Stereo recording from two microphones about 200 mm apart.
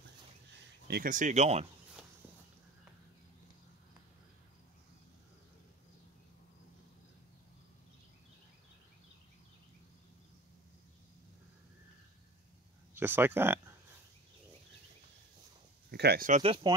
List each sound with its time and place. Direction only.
0.8 s speech: 45° right (ahead or behind)
12.9 s speech: 10° right (ahead or behind)
15.9 s speech: 55° right (ahead or behind)
16.3 s speech: 35° right (ahead or behind)